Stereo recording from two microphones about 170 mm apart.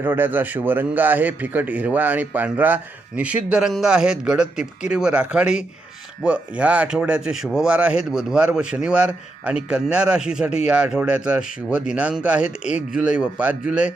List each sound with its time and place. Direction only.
0.0 s a man's voice: 10° right (ahead or behind)